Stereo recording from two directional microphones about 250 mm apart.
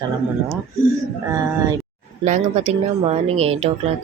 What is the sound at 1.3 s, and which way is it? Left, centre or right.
Speech, centre.